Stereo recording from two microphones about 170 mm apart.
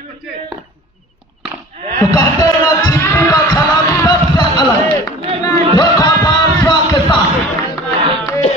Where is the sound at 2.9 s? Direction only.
15° left (ahead or behind).